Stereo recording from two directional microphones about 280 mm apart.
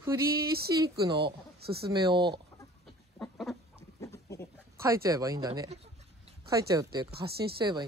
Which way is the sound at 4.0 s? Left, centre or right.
Centre.